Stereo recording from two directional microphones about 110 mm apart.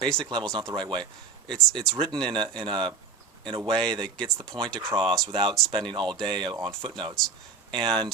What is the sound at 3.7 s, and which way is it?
Speech, 5° left (ahead or behind).